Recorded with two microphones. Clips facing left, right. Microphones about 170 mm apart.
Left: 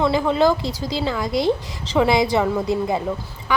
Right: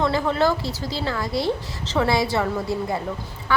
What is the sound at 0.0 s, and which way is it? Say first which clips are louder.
A woman's voice: left 3 dB; 15° left (ahead or behind).